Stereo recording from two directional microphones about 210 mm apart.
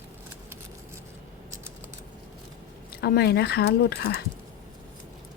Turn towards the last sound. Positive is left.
turn(degrees=50)  # may be behind; listen again after turning